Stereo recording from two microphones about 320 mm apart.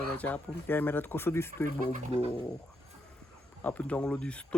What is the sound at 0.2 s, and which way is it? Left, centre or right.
Speech, centre.